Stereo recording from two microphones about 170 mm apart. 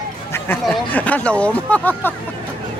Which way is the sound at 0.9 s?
10° left (ahead or behind).